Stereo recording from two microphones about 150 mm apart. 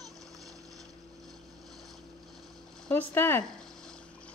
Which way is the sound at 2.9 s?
15° left (ahead or behind).